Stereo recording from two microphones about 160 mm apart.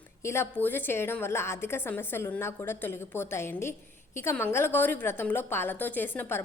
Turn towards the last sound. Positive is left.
turn(degrees=15)  # may be behind; listen again after turning